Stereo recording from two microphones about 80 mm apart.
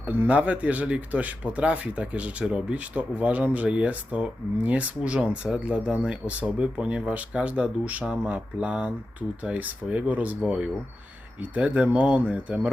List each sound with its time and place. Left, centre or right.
0.0 s speech: centre